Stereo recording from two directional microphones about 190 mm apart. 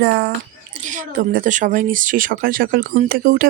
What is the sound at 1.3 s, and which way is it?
Speech, 45° right (ahead or behind).